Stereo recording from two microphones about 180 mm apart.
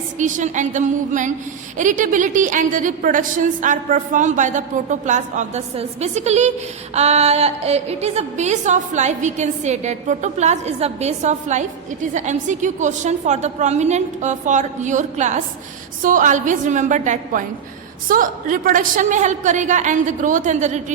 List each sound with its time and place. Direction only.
0.2 s a woman's voice: 45° right (ahead or behind)